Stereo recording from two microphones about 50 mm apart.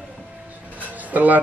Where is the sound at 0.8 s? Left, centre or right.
Right.